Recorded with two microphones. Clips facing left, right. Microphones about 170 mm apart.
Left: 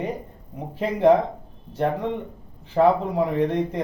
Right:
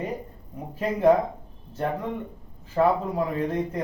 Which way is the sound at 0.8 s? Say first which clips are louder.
Left 2 dB; 25° left (ahead or behind).